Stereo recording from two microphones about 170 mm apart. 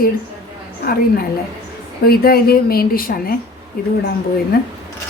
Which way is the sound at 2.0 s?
60° left (ahead or behind).